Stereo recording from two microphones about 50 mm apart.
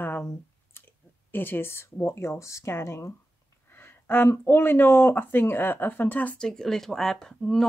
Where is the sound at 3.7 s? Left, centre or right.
Left.